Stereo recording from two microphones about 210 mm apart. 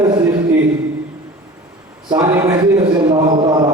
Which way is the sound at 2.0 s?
15° right (ahead or behind).